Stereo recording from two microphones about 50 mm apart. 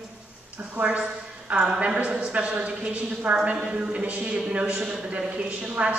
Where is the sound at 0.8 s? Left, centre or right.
Right.